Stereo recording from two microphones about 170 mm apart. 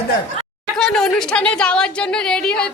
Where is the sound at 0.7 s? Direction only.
5° left (ahead or behind).